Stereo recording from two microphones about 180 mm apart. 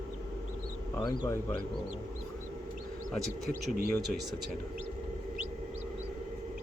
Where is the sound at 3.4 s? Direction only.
55° right (ahead or behind).